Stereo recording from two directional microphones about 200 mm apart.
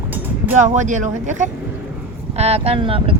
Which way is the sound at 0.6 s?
40° right (ahead or behind).